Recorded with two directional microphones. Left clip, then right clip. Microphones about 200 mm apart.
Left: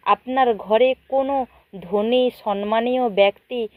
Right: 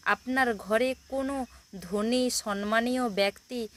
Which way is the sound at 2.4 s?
55° right (ahead or behind).